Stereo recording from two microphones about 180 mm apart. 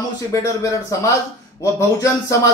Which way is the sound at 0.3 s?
15° left (ahead or behind).